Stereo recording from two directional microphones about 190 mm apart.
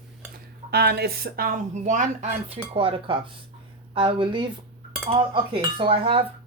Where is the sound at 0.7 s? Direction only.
55° right (ahead or behind); by 6.2 s 30° right (ahead or behind).